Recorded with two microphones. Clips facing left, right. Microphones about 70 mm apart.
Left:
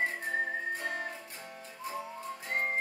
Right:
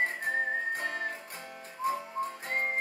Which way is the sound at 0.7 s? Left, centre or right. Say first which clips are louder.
Right 2 dB; right.